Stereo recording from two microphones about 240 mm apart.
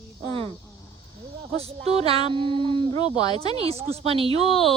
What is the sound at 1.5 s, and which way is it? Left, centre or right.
Speech, right.